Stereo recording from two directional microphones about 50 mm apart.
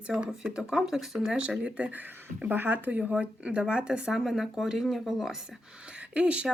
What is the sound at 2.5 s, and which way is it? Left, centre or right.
Speech, right.